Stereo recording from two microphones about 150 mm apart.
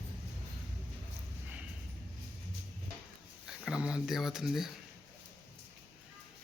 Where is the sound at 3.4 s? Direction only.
5° right (ahead or behind).